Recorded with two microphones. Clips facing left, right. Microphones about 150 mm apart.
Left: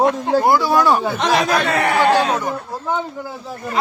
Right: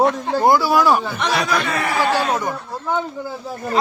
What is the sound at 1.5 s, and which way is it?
Speech, 70° left (ahead or behind).